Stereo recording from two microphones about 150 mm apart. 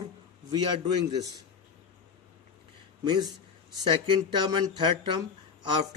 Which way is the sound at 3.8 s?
30° right (ahead or behind).